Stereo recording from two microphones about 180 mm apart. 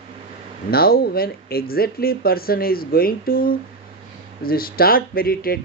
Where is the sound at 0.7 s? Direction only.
55° left (ahead or behind).